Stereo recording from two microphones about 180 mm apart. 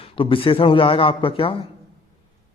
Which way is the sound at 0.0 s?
30° left (ahead or behind).